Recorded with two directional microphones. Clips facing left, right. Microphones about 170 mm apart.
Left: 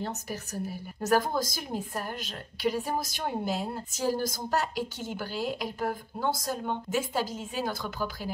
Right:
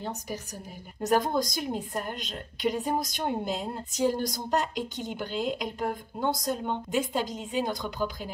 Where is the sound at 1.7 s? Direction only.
20° right (ahead or behind).